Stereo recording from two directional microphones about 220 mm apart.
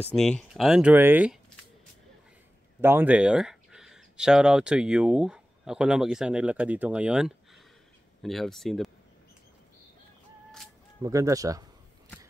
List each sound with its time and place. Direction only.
0.1 s speech: 5° left (ahead or behind)
2.8 s speech: 10° right (ahead or behind)
11.0 s speech: 15° right (ahead or behind)